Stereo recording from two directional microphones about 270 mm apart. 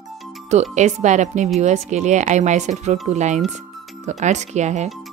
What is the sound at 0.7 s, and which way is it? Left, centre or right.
Speech, right.